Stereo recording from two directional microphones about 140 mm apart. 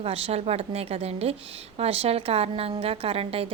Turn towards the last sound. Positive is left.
turn(degrees=-45)  # may be behind; listen again after turning